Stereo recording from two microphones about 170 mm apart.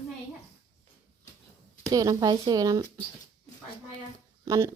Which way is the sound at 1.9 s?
20° right (ahead or behind).